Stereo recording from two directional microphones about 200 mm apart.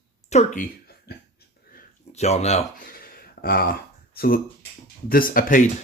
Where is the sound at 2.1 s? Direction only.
35° left (ahead or behind).